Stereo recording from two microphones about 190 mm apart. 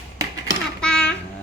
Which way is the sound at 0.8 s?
5° left (ahead or behind).